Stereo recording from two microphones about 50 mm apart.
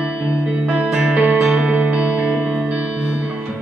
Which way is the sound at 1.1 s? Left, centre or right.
Right.